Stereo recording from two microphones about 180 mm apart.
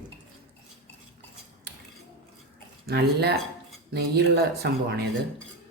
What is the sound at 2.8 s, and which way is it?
Speech, 65° right (ahead or behind).